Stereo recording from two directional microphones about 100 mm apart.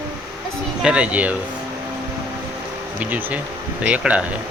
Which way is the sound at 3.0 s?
15° right (ahead or behind).